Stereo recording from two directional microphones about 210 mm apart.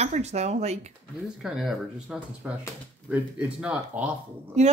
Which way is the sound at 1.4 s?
Centre (ahead or behind).